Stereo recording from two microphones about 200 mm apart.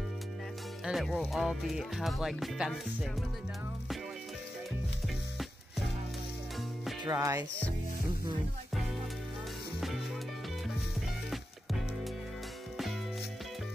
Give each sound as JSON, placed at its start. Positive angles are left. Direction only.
{"t": 0.8, "sound": "speech", "side_deg": 0}
{"t": 7.1, "sound": "music", "side_deg": -15}
{"t": 9.8, "sound": "music", "side_deg": 0}